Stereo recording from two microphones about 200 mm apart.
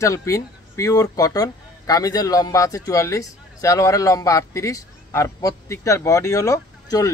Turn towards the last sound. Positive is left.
turn(degrees=15)  # may be behind; listen again after turning